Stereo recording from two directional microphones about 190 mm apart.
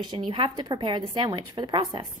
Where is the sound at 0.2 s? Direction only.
25° right (ahead or behind).